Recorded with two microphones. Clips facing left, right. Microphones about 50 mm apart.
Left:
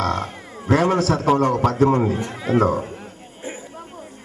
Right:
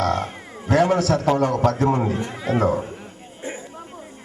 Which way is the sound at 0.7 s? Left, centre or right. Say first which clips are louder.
Even; left.